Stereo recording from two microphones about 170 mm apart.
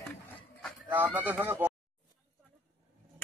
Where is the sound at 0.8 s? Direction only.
10° right (ahead or behind).